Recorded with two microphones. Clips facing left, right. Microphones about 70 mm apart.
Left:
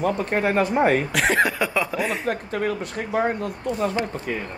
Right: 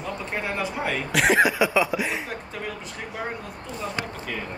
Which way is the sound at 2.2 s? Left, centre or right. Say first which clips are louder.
Left 9 dB; left.